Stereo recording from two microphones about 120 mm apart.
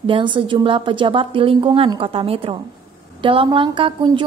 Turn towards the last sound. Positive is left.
turn(degrees=-45)  # may be behind; listen again after turning